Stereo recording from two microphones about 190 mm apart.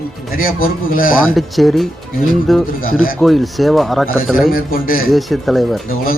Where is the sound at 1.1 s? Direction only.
Centre (ahead or behind).